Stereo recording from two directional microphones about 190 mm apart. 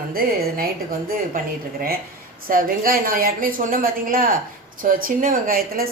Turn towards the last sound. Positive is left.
turn(degrees=-50)  # may be behind; listen again after turning